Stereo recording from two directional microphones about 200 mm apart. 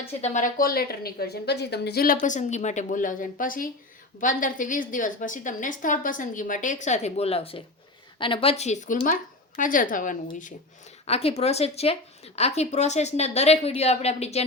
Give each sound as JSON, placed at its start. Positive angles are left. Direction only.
{"t": 0.2, "sound": "speech", "side_deg": 35}
{"t": 2.2, "sound": "speech", "side_deg": 35}